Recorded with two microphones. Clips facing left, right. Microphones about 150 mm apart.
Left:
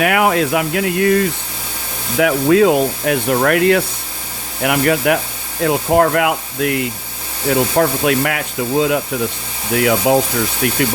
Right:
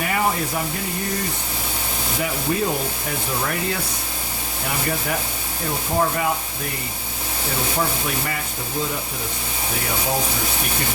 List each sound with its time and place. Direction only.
0.0 s speech: 80° left
2.1 s speech: 90° left